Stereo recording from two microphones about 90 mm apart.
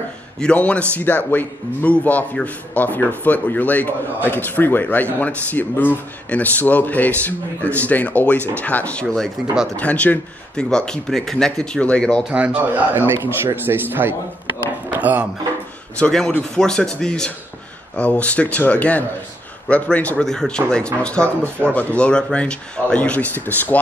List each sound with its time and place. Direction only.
0.4 s a man's voice: 15° left (ahead or behind)
9.4 s speech: 5° right (ahead or behind)
9.8 s a man's voice: 15° left (ahead or behind)
12.3 s a man's voice: 15° right (ahead or behind)
14.9 s a sound: 20° right (ahead or behind)
16.0 s a man's voice: 5° left (ahead or behind)